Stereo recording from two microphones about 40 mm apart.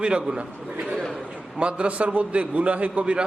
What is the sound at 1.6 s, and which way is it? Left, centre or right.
A man's voice, right.